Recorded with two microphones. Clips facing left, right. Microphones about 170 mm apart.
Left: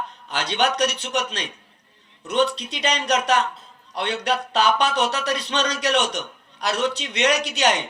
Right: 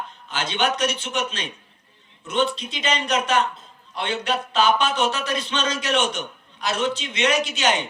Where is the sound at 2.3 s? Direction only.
70° left (ahead or behind).